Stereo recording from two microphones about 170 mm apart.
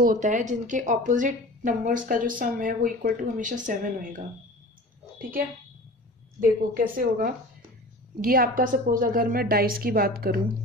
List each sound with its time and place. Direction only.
0.0 s a woman's voice: 50° right (ahead or behind)
6.4 s a woman's voice: 55° right (ahead or behind)